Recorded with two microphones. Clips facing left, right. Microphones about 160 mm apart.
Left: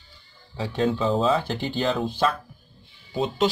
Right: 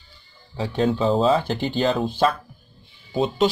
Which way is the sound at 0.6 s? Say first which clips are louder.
Right 2 dB; 30° right (ahead or behind).